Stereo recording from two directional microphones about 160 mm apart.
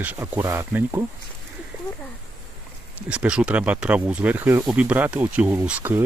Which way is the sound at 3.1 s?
5° right (ahead or behind).